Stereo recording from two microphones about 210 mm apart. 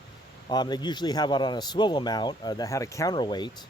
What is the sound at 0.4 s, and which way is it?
Speech, 20° left (ahead or behind).